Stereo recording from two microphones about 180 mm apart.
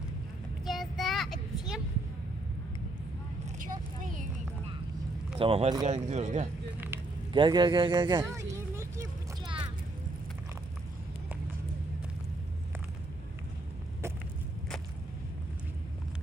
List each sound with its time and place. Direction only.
0.6 s child singing: centre (ahead or behind)
3.6 s vehicle: 45° right (ahead or behind)
5.4 s speech: 35° right (ahead or behind)
6.7 s vehicle: 10° right (ahead or behind)
7.3 s a sound: 25° right (ahead or behind)